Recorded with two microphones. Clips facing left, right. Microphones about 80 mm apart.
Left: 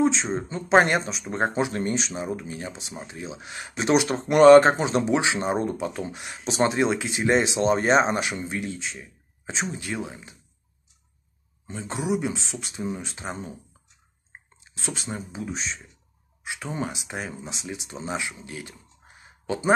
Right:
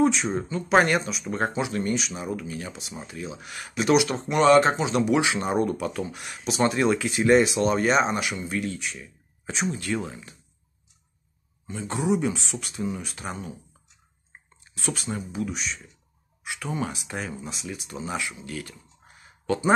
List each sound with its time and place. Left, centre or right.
0.0 s speech: left
5.0 s speech: left
6.4 s speech: left
8.5 s speech: left
11.6 s speech: left
14.7 s speech: left